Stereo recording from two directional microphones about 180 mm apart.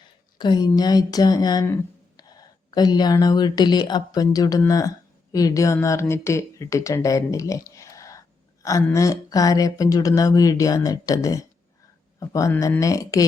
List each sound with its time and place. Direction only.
0.3 s speech: 25° left (ahead or behind)